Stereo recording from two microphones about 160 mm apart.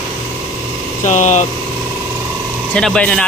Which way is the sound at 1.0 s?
45° left (ahead or behind).